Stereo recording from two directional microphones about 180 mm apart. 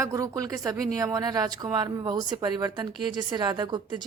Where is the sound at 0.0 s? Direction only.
20° right (ahead or behind).